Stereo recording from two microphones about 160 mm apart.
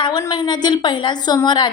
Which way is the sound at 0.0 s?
25° left (ahead or behind).